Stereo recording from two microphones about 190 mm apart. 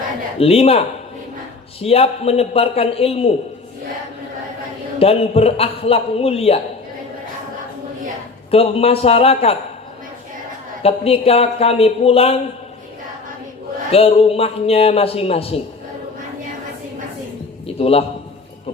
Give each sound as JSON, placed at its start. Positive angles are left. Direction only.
{"t": 0.3, "sound": "a man's voice", "side_deg": 30}
{"t": 4.9, "sound": "a man's voice", "side_deg": 30}
{"t": 8.4, "sound": "a man's voice", "side_deg": 30}
{"t": 10.8, "sound": "a man's voice", "side_deg": 30}
{"t": 13.9, "sound": "a man's voice", "side_deg": 30}
{"t": 17.7, "sound": "a man's voice", "side_deg": 30}